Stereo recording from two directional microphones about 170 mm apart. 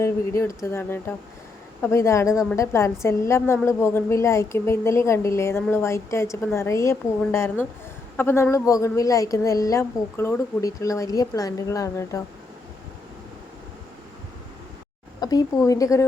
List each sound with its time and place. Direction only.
0.0 s a woman's voice: 15° left (ahead or behind)
15.2 s a woman's voice: 25° left (ahead or behind)